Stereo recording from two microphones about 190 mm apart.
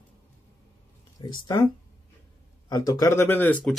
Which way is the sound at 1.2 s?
25° left (ahead or behind).